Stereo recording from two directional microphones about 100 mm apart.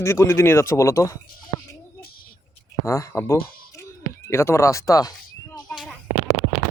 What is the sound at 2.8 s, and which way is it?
Speech, 30° left (ahead or behind).